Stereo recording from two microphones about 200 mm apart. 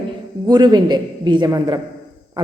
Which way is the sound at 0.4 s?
20° right (ahead or behind).